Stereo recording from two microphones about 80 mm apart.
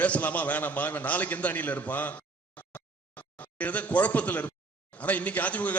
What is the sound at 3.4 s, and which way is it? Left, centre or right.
A man's voice, centre.